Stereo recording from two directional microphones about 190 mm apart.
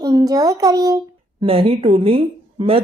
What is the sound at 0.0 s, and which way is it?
Speech, 20° right (ahead or behind).